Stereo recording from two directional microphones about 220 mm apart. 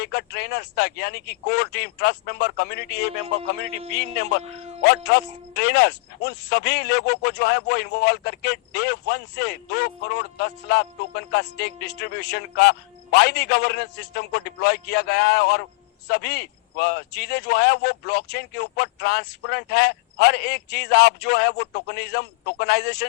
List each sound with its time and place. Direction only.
0.0 s speech: 45° left (ahead or behind)